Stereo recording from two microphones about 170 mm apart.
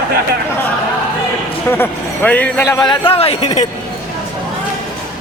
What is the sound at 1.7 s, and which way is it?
A man's voice, 10° left (ahead or behind).